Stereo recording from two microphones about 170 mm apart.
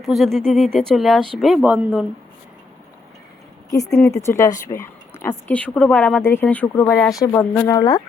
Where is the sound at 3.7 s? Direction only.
20° left (ahead or behind).